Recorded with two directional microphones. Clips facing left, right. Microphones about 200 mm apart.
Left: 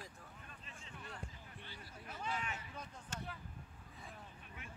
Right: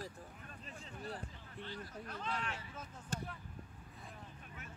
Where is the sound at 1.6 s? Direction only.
10° left (ahead or behind).